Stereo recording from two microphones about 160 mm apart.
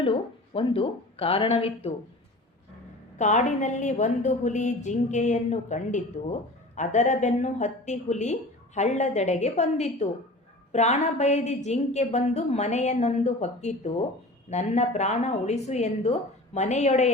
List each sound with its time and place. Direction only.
0.0 s speech: 35° left (ahead or behind)
3.2 s a woman's voice: 50° left (ahead or behind)